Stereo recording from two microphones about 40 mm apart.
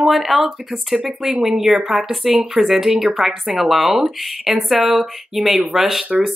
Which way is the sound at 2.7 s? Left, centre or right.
Centre.